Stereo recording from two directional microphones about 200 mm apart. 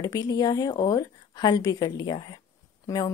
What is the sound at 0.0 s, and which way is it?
A woman's voice, 20° left (ahead or behind).